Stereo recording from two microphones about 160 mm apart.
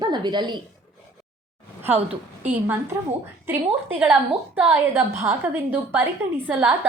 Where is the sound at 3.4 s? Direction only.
15° right (ahead or behind).